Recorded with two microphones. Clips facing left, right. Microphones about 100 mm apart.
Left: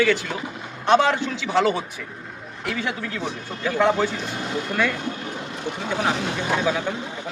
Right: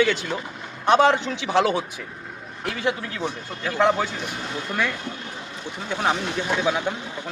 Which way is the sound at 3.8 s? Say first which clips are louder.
Even; 15° right (ahead or behind).